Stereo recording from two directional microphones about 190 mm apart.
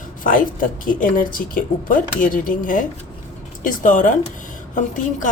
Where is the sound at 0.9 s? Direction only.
45° left (ahead or behind).